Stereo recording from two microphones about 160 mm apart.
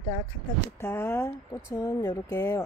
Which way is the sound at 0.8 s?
15° left (ahead or behind).